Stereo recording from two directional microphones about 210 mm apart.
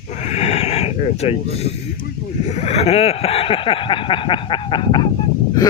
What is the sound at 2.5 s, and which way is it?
Speech, 30° left (ahead or behind).